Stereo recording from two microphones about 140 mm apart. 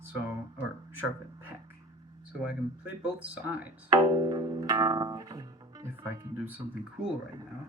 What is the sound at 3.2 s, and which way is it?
Speech, 10° right (ahead or behind).